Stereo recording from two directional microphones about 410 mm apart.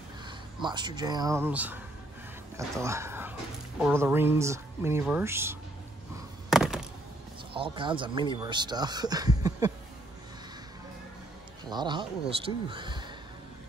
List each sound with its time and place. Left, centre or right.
0.6 s speech: centre
6.5 s a sound: centre
7.5 s speech: centre
11.7 s speech: centre